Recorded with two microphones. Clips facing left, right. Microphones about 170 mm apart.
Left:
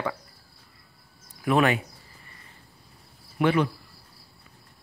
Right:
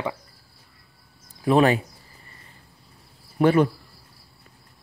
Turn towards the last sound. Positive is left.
turn(degrees=-40)  # may be behind; listen again after turning